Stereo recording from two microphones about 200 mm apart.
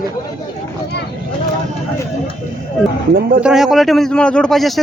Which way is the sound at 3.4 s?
Centre (ahead or behind).